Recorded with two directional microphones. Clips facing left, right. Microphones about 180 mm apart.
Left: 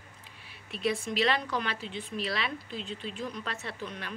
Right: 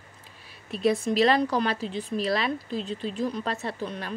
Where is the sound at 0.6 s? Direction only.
40° right (ahead or behind).